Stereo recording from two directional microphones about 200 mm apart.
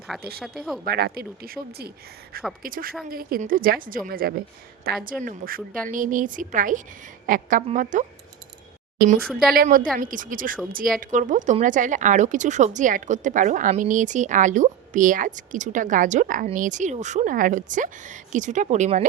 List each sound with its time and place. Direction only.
0.1 s speech: centre (ahead or behind)
0.9 s a woman's voice: 50° right (ahead or behind); by 19.0 s 35° right (ahead or behind)